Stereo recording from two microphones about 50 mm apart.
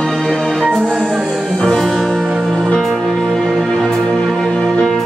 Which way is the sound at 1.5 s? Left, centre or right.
Centre.